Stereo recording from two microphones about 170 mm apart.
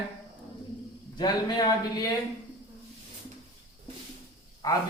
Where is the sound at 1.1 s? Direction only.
25° left (ahead or behind).